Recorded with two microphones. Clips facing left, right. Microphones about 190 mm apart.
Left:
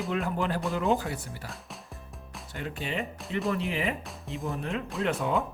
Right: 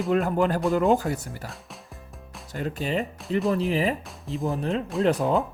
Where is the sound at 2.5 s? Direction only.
40° right (ahead or behind).